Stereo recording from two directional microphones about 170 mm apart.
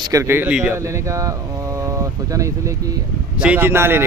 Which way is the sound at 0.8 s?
20° right (ahead or behind).